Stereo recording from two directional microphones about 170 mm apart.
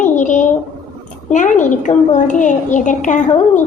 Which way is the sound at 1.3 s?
45° left (ahead or behind).